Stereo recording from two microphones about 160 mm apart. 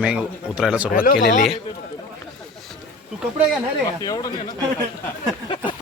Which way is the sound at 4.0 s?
25° left (ahead or behind).